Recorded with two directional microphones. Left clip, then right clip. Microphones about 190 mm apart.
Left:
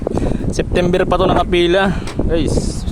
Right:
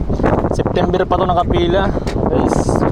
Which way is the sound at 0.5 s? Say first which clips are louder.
Even; 25° left (ahead or behind).